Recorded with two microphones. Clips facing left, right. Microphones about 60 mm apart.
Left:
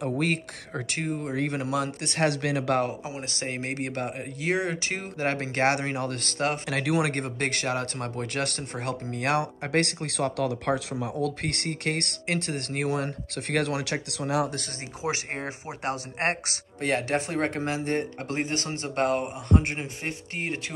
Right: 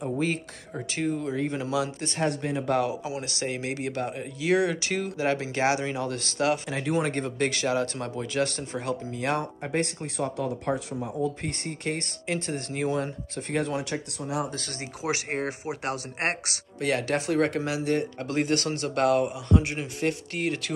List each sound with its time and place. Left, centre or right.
0.2 s speech: left
3.0 s speech: left
6.7 s speech: left
15.0 s speech: left
19.8 s speech: left